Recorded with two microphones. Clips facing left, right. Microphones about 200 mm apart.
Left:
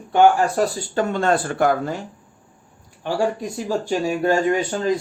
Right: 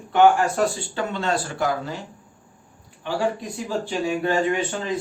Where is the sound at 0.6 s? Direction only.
45° left (ahead or behind).